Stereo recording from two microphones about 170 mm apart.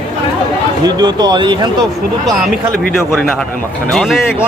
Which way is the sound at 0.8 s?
25° right (ahead or behind).